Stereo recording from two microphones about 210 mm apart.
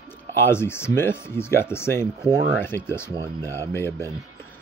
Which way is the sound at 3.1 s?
15° right (ahead or behind).